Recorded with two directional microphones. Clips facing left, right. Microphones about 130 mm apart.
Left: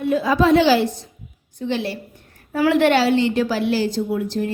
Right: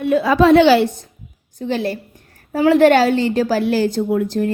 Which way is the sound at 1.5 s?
40° right (ahead or behind).